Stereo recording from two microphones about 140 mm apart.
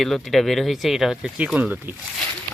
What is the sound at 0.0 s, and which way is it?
Speech, centre (ahead or behind).